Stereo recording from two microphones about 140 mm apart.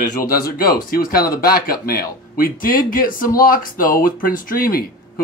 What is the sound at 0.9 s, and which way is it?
Speech, 90° left.